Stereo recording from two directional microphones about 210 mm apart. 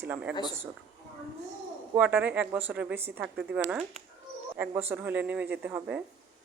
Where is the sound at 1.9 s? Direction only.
5° right (ahead or behind).